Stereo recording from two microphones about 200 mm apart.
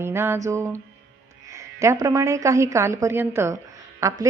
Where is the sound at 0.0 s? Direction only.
10° right (ahead or behind).